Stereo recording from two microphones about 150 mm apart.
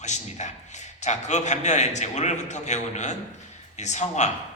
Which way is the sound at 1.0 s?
50° left (ahead or behind).